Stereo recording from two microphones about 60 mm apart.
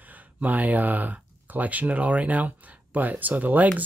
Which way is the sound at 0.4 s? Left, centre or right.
Right.